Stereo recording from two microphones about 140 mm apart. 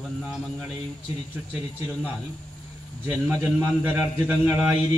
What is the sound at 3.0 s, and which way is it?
A man's voice, 15° right (ahead or behind).